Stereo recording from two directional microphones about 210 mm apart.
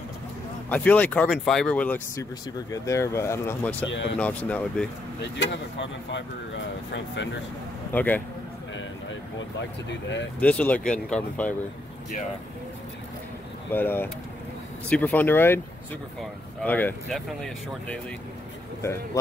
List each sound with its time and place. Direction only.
0.7 s speech: 5° left (ahead or behind)
3.9 s speech: 60° left (ahead or behind)
4.2 s speech: 5° left (ahead or behind)
5.4 s speech: 60° left (ahead or behind)
7.9 s speech: 10° left (ahead or behind)
10.4 s speech: 5° left (ahead or behind)
13.7 s speech: 10° left (ahead or behind)